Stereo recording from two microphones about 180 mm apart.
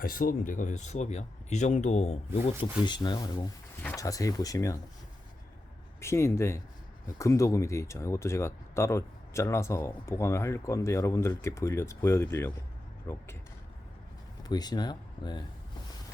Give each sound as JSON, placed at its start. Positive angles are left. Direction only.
{"t": 0.0, "sound": "speech", "side_deg": 55}
{"t": 2.5, "sound": "speech", "side_deg": 25}
{"t": 6.0, "sound": "speech", "side_deg": 15}
{"t": 14.4, "sound": "speech", "side_deg": 20}